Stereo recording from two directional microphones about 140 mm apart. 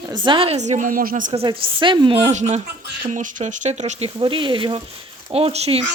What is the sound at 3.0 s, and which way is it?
A woman's voice, 65° right (ahead or behind).